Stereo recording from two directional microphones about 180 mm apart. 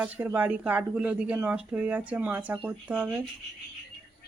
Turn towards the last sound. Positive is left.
turn(degrees=-5)  # may be behind; listen again after turning